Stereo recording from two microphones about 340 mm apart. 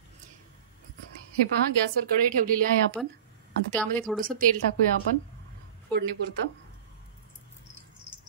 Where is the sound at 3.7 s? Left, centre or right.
Centre.